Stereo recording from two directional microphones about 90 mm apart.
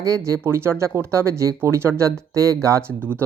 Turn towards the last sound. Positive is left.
turn(degrees=15)  # may be behind; listen again after turning